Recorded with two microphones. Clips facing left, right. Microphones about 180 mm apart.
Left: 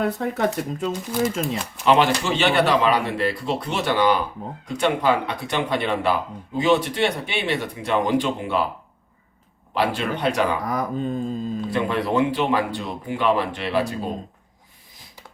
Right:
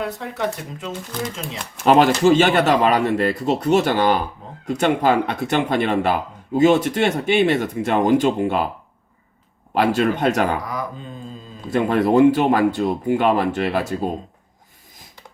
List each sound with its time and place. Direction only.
0.0 s speech: 45° left (ahead or behind)
1.2 s speech: centre (ahead or behind)
1.8 s speech: 45° right (ahead or behind)
9.7 s speech: 45° right (ahead or behind)
10.7 s speech: 50° left (ahead or behind)
11.7 s speech: 45° right (ahead or behind)